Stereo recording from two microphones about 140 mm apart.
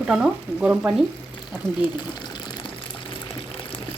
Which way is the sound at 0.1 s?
5° right (ahead or behind).